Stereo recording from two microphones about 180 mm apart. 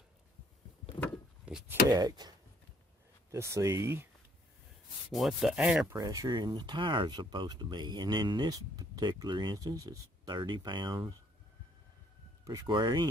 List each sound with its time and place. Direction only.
1.4 s speech: 5° right (ahead or behind)
1.9 s speech: 20° right (ahead or behind)
5.1 s speech: centre (ahead or behind)
5.9 s speech: 20° right (ahead or behind)
12.4 s speech: 25° right (ahead or behind)